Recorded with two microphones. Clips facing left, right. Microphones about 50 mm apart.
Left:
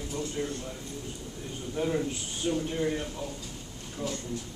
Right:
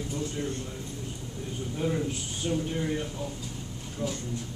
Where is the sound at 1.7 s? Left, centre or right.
Centre.